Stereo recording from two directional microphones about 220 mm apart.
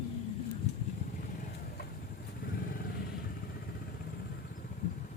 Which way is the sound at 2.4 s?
40° left (ahead or behind).